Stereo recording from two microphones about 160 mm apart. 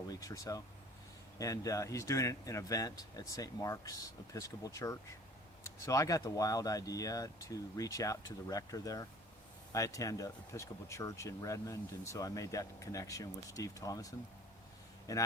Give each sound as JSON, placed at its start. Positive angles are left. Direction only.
{"t": 0.1, "sound": "speech", "side_deg": 20}
{"t": 15.1, "sound": "speech", "side_deg": 20}